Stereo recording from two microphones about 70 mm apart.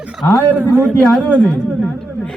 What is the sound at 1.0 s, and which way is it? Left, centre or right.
A man's voice, centre.